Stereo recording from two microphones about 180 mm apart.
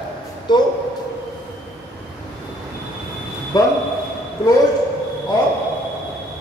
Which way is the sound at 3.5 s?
20° left (ahead or behind).